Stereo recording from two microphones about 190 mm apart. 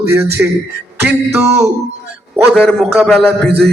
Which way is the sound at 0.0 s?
10° right (ahead or behind).